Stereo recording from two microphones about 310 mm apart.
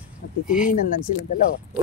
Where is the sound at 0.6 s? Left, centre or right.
Left.